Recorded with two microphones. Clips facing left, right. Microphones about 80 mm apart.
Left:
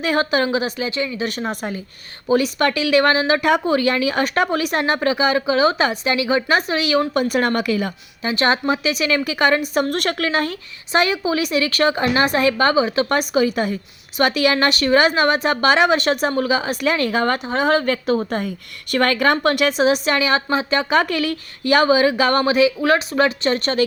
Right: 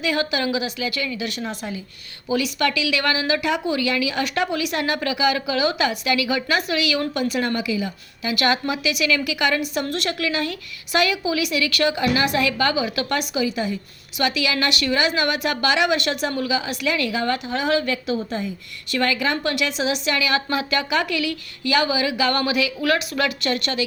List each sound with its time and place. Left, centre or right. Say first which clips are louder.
0.0 s a woman's voice: left 4 dB; left
8.2 s a woman's voice: left 3 dB; left